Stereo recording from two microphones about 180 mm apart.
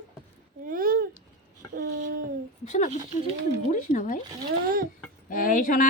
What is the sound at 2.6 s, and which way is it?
Speech, 45° left (ahead or behind).